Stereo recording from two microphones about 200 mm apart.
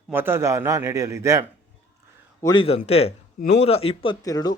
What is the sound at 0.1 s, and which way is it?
A man's voice, 10° right (ahead or behind).